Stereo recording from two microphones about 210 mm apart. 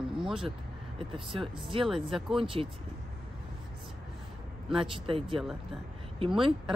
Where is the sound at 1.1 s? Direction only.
25° right (ahead or behind).